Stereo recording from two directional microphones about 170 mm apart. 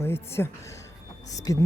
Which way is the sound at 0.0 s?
15° left (ahead or behind).